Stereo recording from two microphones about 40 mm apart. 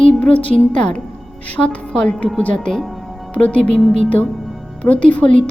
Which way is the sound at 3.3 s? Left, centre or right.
Left.